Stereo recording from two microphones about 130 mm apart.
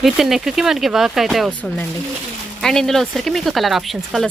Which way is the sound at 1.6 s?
10° left (ahead or behind).